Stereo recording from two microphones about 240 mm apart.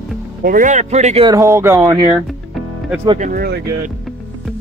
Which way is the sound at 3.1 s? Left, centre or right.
Right.